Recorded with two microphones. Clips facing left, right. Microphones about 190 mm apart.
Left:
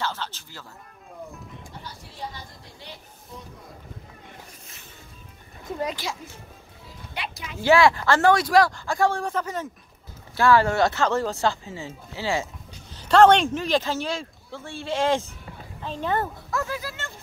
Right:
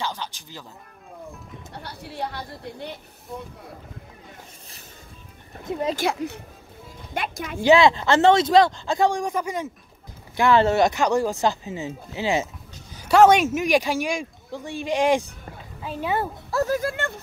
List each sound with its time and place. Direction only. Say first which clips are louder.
0.0 s music: even; 15° right (ahead or behind)
1.7 s speech: right 5 dB; 65° right (ahead or behind)
5.9 s speech: right 9 dB; 60° right (ahead or behind)
7.2 s speech: right 6 dB; 50° right (ahead or behind)
7.6 s speech: right 2 dB; 20° right (ahead or behind)
16.4 s speech: right 7 dB; 40° right (ahead or behind); by 17.1 s 55° right (ahead or behind)